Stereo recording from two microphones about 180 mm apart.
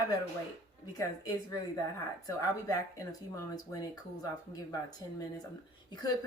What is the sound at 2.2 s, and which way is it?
Speech, 20° left (ahead or behind).